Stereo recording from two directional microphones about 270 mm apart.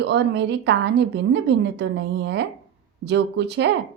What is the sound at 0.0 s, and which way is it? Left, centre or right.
A woman's voice, right.